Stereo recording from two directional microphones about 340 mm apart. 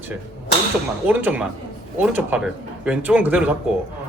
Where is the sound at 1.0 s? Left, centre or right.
Centre.